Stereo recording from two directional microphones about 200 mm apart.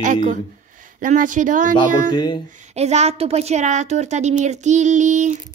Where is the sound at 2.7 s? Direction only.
30° right (ahead or behind).